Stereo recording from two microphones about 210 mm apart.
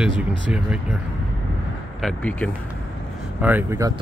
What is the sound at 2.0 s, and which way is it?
Speech, 5° left (ahead or behind).